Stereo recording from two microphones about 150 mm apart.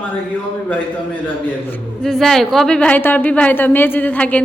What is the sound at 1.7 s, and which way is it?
A woman's voice, 5° left (ahead or behind).